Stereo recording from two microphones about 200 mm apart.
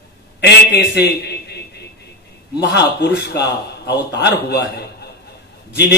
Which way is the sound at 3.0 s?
55° left (ahead or behind).